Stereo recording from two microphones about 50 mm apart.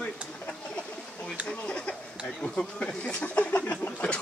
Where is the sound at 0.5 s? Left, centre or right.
Centre.